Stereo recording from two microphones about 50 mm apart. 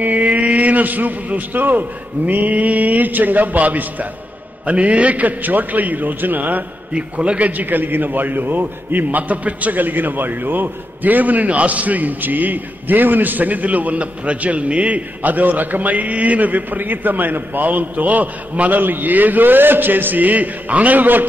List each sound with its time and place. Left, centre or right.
0.0 s a man's voice: right
6.9 s a man's voice: right